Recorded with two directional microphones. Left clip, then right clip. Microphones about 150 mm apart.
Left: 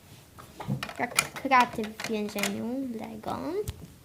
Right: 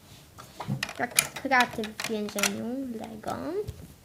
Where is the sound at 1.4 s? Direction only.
10° left (ahead or behind).